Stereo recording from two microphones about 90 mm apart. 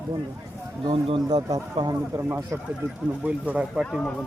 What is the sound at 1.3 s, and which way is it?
Speech, 55° right (ahead or behind).